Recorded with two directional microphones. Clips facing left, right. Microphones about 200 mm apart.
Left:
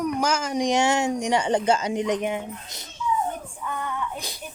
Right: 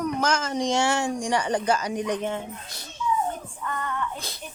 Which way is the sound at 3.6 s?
10° left (ahead or behind).